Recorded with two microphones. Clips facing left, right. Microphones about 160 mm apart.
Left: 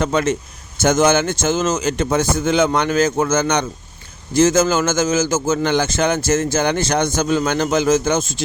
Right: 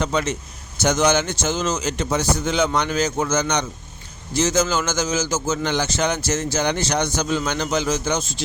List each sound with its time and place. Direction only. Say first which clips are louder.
0.0 s a man's voice: left 5 dB; 50° left (ahead or behind)